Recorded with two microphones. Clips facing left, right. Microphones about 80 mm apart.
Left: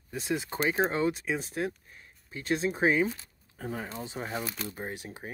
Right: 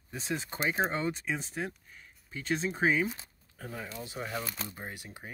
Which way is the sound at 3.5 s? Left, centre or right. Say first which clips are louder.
Left 5 dB; left.